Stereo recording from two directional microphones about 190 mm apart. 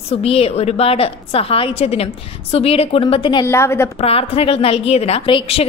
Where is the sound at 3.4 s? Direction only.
15° left (ahead or behind).